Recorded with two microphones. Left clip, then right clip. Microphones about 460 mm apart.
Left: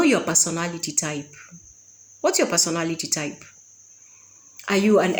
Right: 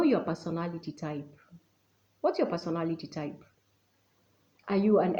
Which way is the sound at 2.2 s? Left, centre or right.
Right.